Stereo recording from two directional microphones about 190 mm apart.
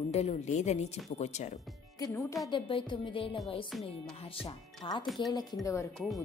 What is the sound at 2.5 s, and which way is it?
A woman's voice, 25° left (ahead or behind).